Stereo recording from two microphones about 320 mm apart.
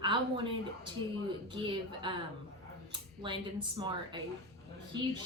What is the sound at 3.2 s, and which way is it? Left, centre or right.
Speech, centre.